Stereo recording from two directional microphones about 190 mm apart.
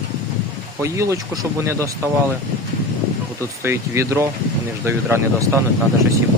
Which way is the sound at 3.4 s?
15° right (ahead or behind).